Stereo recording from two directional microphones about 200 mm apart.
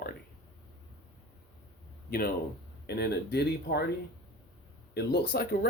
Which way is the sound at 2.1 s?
50° left (ahead or behind).